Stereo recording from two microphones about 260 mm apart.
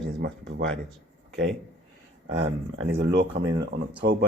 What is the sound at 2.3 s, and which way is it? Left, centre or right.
Speech, right.